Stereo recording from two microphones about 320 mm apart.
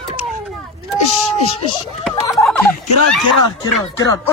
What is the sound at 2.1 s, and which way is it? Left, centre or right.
Speech, centre.